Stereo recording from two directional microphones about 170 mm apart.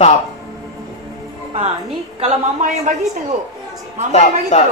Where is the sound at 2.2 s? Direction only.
40° right (ahead or behind).